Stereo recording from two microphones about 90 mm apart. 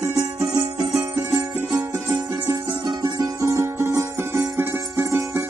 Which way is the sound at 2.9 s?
45° right (ahead or behind).